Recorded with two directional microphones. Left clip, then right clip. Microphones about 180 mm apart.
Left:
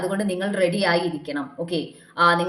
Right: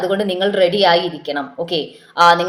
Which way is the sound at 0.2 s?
10° left (ahead or behind).